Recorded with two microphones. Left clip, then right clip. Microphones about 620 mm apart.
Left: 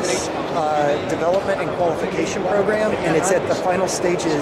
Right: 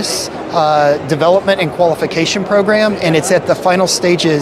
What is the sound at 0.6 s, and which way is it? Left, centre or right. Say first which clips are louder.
Speech: right 9 dB; right.